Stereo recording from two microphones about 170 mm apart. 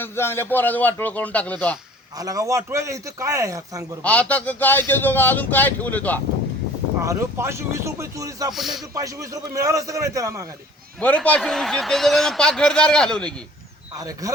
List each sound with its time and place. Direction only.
0.0 s speech: 15° left (ahead or behind)
2.1 s a man's voice: 20° right (ahead or behind)
4.0 s speech: 10° left (ahead or behind)
7.0 s a man's voice: 15° right (ahead or behind)
8.5 s a man's voice: centre (ahead or behind)
9.0 s a man's voice: 20° right (ahead or behind)
11.0 s a man's voice: 10° left (ahead or behind)
13.9 s a man's voice: 20° right (ahead or behind)